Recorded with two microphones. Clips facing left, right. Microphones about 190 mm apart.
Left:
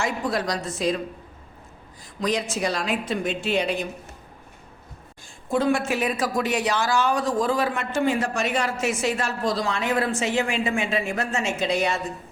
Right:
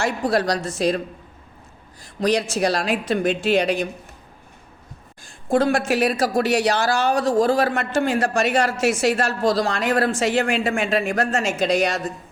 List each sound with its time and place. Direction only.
0.3 s a woman's voice: 75° right (ahead or behind); by 3.8 s 90° right
5.5 s a man's voice: 85° right